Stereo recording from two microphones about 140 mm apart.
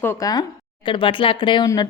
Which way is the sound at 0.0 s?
20° left (ahead or behind).